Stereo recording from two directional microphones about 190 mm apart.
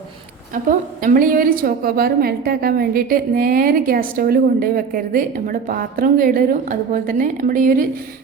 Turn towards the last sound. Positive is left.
turn(degrees=-45)  # may be behind; listen again after turning